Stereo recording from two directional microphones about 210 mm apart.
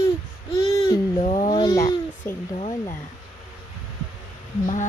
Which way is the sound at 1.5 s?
15° left (ahead or behind).